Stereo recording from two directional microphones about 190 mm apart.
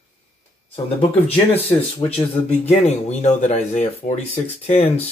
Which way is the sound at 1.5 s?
30° left (ahead or behind).